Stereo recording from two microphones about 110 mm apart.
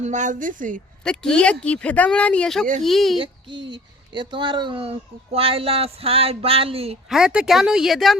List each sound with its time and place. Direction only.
0.0 s a woman's voice: 90° right
1.0 s speech: 5° left (ahead or behind)
3.2 s speech: 45° right (ahead or behind)
7.1 s speech: 5° right (ahead or behind)